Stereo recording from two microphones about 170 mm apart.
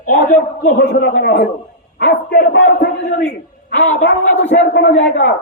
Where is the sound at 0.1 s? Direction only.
60° left (ahead or behind).